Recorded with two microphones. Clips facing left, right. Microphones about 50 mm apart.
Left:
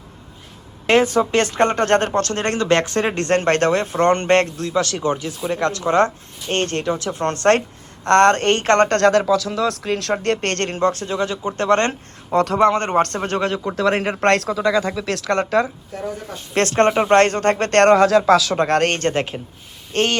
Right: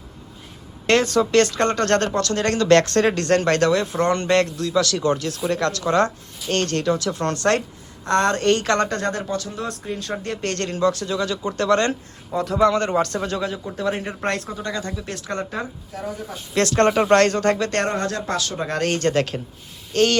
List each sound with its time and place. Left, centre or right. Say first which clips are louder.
0.9 s speech: left 2 dB; centre
2.1 s speech: left 1 dB; left; by 3.2 s centre
3.2 s speech: left 1 dB; left; by 5.5 s centre
5.5 s speech: left 4 dB; left
8.0 s speech: left 5 dB; left
8.9 s speech: left 9 dB; left
12.3 s speech: left 6 dB; left
12.5 s speech: even; left
13.5 s speech: left 6 dB; left
16.6 s speech: left 1 dB; left
17.7 s speech: left 10 dB; left
19.1 s speech: right 1 dB; left
19.9 s speech: right 1 dB; left